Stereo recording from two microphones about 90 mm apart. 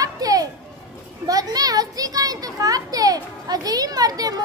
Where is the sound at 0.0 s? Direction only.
45° right (ahead or behind).